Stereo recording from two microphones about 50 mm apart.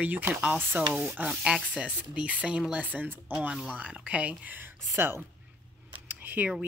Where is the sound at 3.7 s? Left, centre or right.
Right.